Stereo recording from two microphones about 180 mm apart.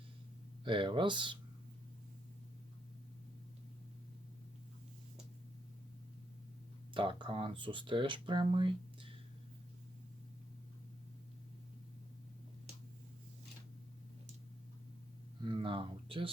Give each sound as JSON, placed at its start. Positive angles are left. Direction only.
{"t": 0.6, "sound": "speech", "side_deg": -25}
{"t": 6.9, "sound": "speech", "side_deg": -30}
{"t": 15.4, "sound": "speech", "side_deg": -30}